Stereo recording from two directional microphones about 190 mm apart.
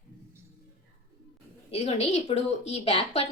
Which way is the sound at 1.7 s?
35° left (ahead or behind).